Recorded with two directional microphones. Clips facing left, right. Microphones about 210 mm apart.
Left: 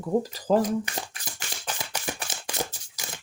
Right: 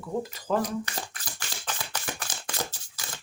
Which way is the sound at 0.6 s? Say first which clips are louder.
Left 4 dB; 20° left (ahead or behind).